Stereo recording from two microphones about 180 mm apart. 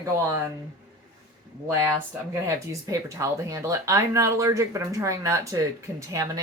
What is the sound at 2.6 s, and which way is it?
Speech, 15° right (ahead or behind).